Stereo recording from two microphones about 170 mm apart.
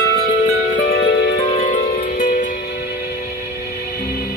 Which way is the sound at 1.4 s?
45° left (ahead or behind).